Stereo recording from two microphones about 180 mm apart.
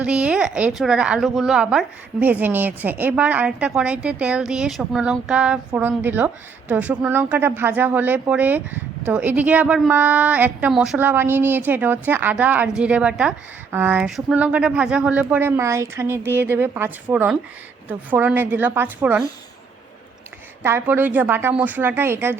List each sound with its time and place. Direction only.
0.0 s speech: 5° right (ahead or behind)
20.6 s speech: 10° right (ahead or behind)